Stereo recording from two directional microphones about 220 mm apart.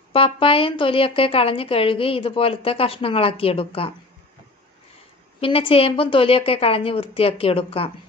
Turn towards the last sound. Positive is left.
turn(degrees=25)  # may be behind; listen again after turning